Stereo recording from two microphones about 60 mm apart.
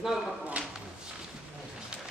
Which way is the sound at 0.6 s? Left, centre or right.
Right.